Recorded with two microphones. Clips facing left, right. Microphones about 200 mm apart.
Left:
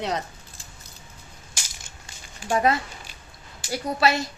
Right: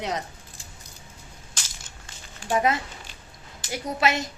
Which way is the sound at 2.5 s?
20° right (ahead or behind).